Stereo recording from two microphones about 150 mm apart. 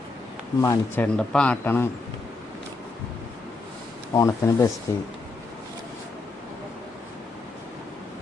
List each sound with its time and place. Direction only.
0.6 s speech: 20° left (ahead or behind)
1.0 s speech: 5° left (ahead or behind)
4.1 s speech: 20° left (ahead or behind)